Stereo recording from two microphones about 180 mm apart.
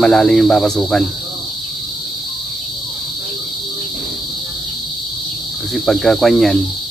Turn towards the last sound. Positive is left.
turn(degrees=0)  # may be behind; listen again after turning